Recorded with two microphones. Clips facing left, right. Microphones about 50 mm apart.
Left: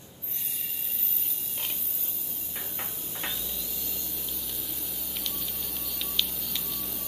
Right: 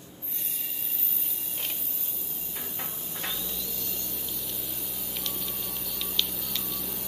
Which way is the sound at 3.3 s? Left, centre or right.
Centre.